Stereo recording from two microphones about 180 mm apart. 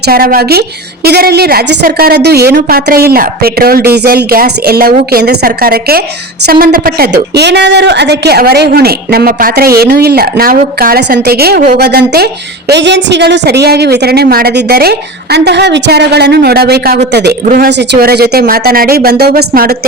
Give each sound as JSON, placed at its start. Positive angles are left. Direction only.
{"t": 0.1, "sound": "speech", "side_deg": -55}